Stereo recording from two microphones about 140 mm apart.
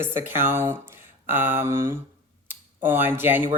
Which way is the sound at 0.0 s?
15° right (ahead or behind).